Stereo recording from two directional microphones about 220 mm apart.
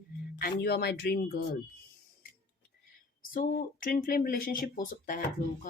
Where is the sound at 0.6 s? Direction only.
45° left (ahead or behind).